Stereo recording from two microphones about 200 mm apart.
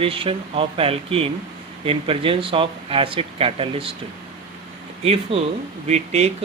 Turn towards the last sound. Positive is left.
turn(degrees=-35)  # may be behind; listen again after turning